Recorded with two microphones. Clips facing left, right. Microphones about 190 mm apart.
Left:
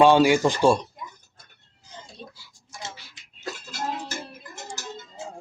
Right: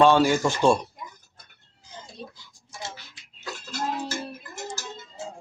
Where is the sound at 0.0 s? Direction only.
10° left (ahead or behind).